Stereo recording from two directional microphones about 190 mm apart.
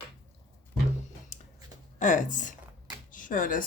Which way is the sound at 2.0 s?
40° left (ahead or behind).